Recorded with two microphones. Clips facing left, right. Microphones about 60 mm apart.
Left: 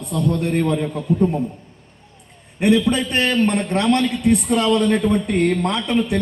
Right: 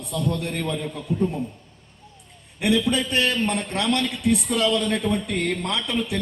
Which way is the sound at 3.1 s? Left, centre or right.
Left.